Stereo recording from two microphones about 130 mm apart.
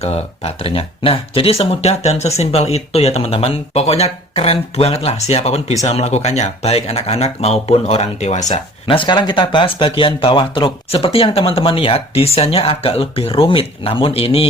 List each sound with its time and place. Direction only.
0.0 s speech: 50° left (ahead or behind)
8.9 s speech: 40° left (ahead or behind)